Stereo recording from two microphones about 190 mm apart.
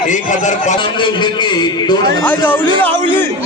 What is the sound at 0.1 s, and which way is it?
Speech, 40° left (ahead or behind).